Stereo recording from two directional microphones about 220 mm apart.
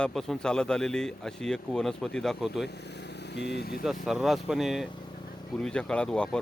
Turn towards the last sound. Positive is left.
turn(degrees=5)  # may be behind; listen again after turning